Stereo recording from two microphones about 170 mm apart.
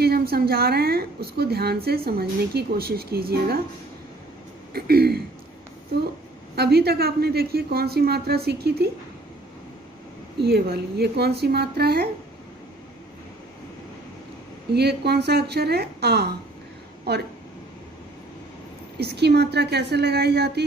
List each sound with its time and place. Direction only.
0.0 s a woman's voice: 65° right (ahead or behind)
4.7 s a woman's voice: 65° right (ahead or behind)
6.5 s a woman's voice: 70° right (ahead or behind)
10.4 s a woman's voice: 70° right (ahead or behind)
14.7 s a woman's voice: 70° right (ahead or behind)
18.9 s a woman's voice: 75° right (ahead or behind)